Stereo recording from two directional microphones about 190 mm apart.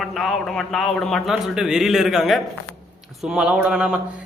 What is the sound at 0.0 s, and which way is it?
A man's voice, centre (ahead or behind).